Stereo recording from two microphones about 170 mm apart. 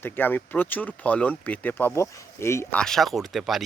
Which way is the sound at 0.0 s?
10° left (ahead or behind).